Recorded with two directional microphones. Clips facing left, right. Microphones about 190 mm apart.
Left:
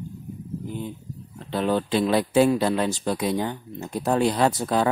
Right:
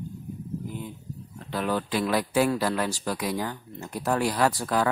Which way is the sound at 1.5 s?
25° left (ahead or behind).